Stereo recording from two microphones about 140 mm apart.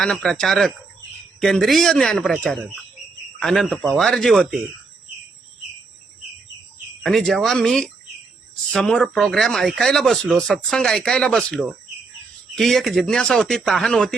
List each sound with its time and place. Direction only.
0.0 s speech: 5° left (ahead or behind)
7.0 s speech: centre (ahead or behind)